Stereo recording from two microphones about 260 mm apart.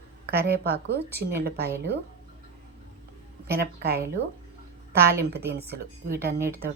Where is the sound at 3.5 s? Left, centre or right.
Right.